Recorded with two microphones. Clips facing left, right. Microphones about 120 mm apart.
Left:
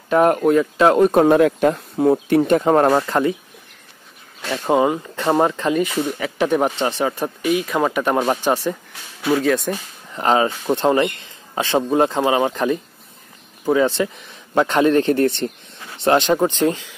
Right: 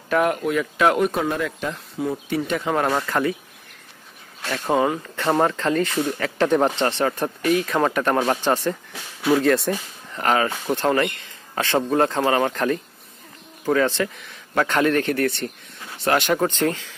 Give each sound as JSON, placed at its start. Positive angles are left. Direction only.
{"t": 0.2, "sound": "speech", "side_deg": 40}
{"t": 0.6, "sound": "speech", "side_deg": 30}
{"t": 1.1, "sound": "speech", "side_deg": 55}
{"t": 4.6, "sound": "speech", "side_deg": 15}
{"t": 9.3, "sound": "speech", "side_deg": 0}
{"t": 9.7, "sound": "speech", "side_deg": 20}